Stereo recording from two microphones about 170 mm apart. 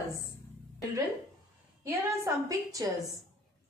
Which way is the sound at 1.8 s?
20° right (ahead or behind).